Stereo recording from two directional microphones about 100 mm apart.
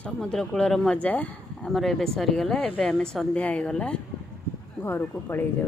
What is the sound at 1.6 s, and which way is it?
A woman's voice, 5° left (ahead or behind).